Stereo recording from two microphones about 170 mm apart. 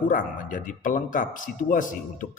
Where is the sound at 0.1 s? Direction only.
50° left (ahead or behind).